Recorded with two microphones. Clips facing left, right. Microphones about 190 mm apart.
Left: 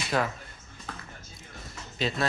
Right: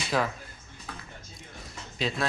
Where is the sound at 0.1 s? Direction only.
Centre (ahead or behind).